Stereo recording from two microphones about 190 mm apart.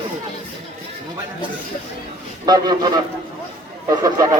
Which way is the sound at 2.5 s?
20° right (ahead or behind).